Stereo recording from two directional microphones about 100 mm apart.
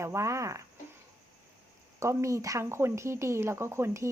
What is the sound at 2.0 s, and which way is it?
Speech, 30° right (ahead or behind).